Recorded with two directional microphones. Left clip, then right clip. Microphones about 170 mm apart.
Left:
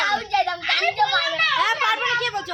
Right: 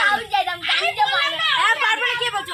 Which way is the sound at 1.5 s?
60° left (ahead or behind).